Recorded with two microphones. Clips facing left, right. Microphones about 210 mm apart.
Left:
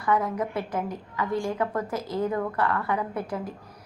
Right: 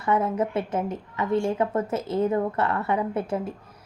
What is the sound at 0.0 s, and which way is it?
A woman's voice, 25° right (ahead or behind).